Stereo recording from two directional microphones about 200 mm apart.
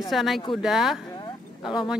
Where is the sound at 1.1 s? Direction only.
25° left (ahead or behind).